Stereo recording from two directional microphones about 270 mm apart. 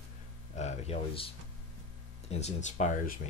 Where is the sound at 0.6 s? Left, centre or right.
Left.